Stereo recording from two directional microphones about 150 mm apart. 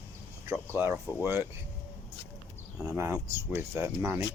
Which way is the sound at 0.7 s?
15° right (ahead or behind).